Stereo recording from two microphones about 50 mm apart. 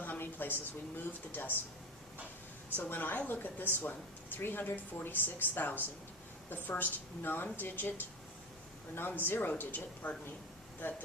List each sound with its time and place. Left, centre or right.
0.0 s a woman's voice: left
2.7 s speech: left